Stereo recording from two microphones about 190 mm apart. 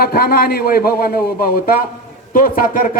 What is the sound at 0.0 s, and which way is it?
Speech, 55° left (ahead or behind).